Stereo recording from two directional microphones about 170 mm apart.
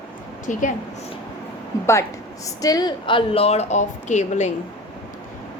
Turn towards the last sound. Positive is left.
turn(degrees=45)  # may be behind; listen again after turning